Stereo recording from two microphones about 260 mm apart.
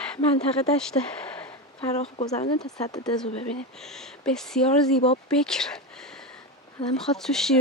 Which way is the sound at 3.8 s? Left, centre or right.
Centre.